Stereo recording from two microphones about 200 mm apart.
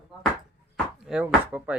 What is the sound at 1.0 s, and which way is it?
Speech, 5° right (ahead or behind).